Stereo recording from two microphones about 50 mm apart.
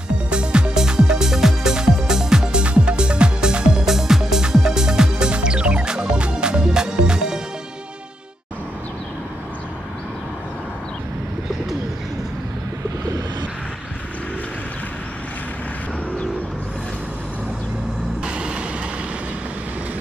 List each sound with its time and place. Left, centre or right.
0.3 s music: right
18.2 s vehicle: centre